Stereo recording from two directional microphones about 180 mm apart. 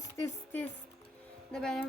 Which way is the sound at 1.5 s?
Centre (ahead or behind).